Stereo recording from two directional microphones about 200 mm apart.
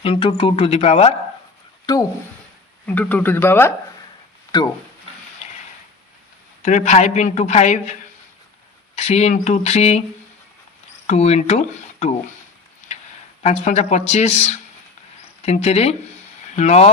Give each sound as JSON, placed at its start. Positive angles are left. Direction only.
{"t": 0.0, "sound": "speech", "side_deg": 30}
{"t": 1.9, "sound": "speech", "side_deg": 20}
{"t": 2.8, "sound": "speech", "side_deg": 10}
{"t": 6.6, "sound": "a woman's voice", "side_deg": 35}
{"t": 9.0, "sound": "a woman's voice", "side_deg": 35}
{"t": 11.0, "sound": "speech", "side_deg": 35}
{"t": 13.4, "sound": "a woman's voice", "side_deg": 35}